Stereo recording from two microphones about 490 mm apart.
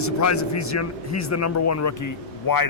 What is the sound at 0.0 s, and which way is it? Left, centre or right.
Speech, left.